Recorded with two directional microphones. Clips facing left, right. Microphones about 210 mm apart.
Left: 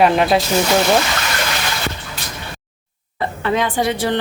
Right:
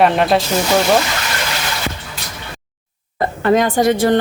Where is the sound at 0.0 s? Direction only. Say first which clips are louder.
Even; centre (ahead or behind).